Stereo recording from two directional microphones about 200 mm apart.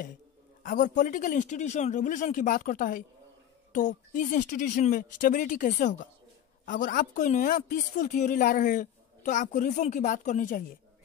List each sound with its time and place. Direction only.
0.7 s a woman's voice: 40° left (ahead or behind)